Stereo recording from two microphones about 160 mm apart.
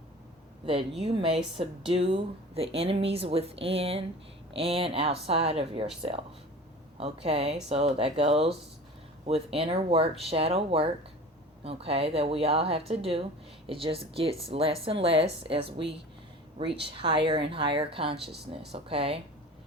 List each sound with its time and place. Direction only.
0.6 s speech: 35° right (ahead or behind)